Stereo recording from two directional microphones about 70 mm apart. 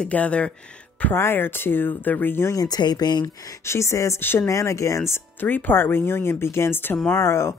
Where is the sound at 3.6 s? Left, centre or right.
Left.